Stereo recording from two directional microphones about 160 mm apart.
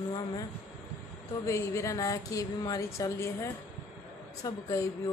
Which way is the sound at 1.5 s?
20° left (ahead or behind).